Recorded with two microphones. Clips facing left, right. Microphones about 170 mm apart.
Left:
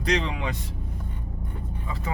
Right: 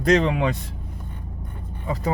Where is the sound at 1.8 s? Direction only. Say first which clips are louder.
Right 10 dB; 40° right (ahead or behind).